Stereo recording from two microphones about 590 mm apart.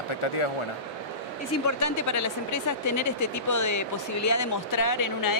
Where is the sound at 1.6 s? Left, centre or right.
Left.